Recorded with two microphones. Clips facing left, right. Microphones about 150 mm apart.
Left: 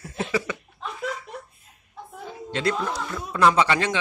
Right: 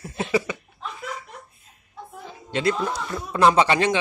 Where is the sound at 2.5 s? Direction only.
15° right (ahead or behind).